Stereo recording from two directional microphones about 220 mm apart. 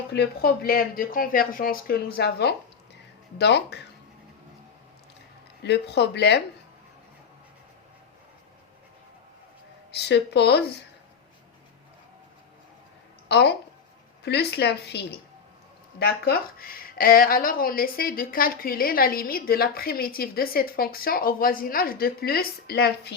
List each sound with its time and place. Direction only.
0.1 s speech: 45° left (ahead or behind)
5.6 s speech: 50° left (ahead or behind)
9.9 s speech: 50° left (ahead or behind)
13.2 s speech: 50° left (ahead or behind)